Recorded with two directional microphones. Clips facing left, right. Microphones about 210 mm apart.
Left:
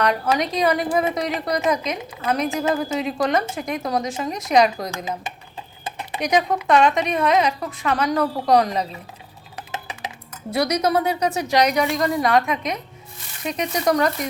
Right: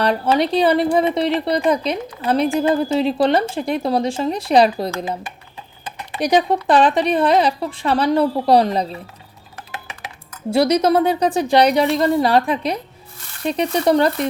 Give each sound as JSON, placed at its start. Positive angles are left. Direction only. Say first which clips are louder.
{"t": 0.0, "sound": "a woman's voice", "louder": "right 4 dB", "side_deg": -30}
{"t": 6.1, "sound": "a woman's voice", "louder": "right 4 dB", "side_deg": -35}
{"t": 10.5, "sound": "a woman's voice", "louder": "right 5 dB", "side_deg": -30}